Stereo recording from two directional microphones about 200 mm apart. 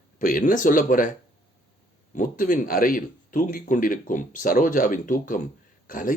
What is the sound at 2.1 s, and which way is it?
Speech, 45° left (ahead or behind).